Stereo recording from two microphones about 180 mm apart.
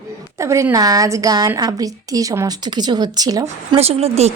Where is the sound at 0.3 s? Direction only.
15° right (ahead or behind).